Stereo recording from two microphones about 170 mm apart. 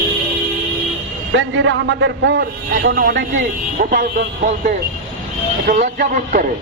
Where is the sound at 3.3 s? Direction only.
50° right (ahead or behind).